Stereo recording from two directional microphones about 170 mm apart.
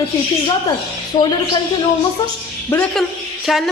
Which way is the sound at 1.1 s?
45° left (ahead or behind).